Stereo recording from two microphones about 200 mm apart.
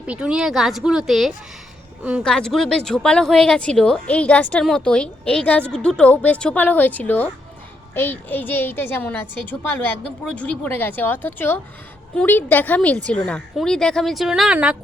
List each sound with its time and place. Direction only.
0.1 s speech: 5° right (ahead or behind)